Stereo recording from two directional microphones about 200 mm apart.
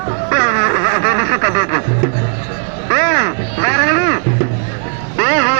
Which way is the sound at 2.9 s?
40° right (ahead or behind).